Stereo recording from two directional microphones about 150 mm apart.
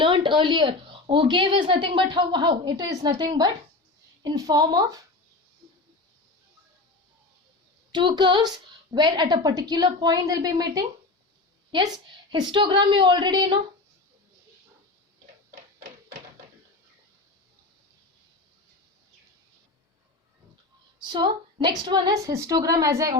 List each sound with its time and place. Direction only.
0.0 s a woman's voice: 30° right (ahead or behind)
7.9 s a woman's voice: 30° right (ahead or behind)
21.0 s a woman's voice: 30° right (ahead or behind)